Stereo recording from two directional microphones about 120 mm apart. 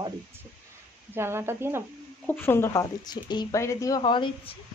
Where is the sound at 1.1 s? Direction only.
20° right (ahead or behind).